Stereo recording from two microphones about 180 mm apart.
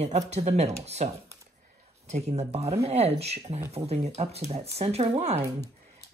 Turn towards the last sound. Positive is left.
turn(degrees=-35)  # may be behind; listen again after turning